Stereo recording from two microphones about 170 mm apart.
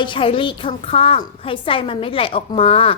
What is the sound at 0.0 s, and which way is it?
A woman's voice, 30° left (ahead or behind).